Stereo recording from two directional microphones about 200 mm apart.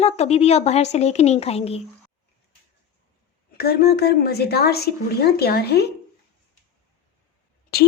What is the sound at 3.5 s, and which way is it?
A woman's voice, 50° left (ahead or behind).